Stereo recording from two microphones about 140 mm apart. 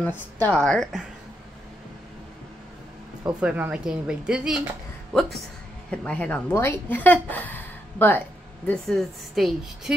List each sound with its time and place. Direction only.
0.4 s a woman's voice: 5° left (ahead or behind)
3.3 s a woman's voice: 10° right (ahead or behind)
5.9 s a woman's voice: 10° left (ahead or behind)